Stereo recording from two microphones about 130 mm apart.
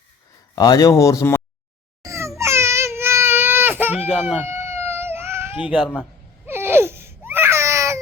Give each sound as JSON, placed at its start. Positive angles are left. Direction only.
{"t": 0.5, "sound": "speech", "side_deg": 30}
{"t": 2.0, "sound": "a sound", "side_deg": -25}
{"t": 2.4, "sound": "baby cry", "side_deg": -20}